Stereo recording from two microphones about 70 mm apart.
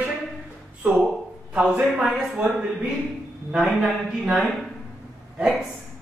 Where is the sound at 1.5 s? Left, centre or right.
Centre.